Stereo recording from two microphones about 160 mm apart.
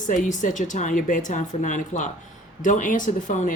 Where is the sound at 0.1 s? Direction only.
55° left (ahead or behind).